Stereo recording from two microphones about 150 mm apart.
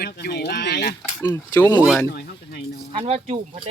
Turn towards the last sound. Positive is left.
turn(degrees=-45)  # may be behind; listen again after turning